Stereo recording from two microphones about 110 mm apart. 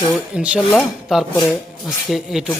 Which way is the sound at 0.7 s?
10° left (ahead or behind).